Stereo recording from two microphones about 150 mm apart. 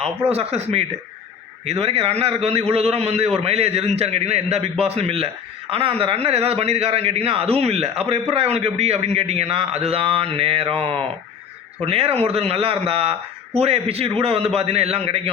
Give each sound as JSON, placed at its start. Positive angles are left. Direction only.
{"t": 0.3, "sound": "a man's voice", "side_deg": -45}